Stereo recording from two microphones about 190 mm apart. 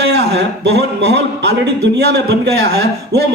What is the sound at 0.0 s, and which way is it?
Speech, 60° right (ahead or behind).